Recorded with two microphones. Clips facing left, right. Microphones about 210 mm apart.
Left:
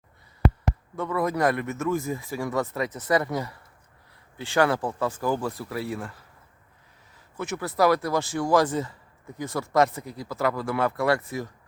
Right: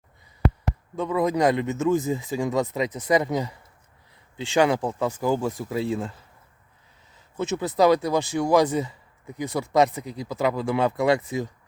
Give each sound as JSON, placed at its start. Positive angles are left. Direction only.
{"t": 0.9, "sound": "speech", "side_deg": -15}
{"t": 7.3, "sound": "speech", "side_deg": -25}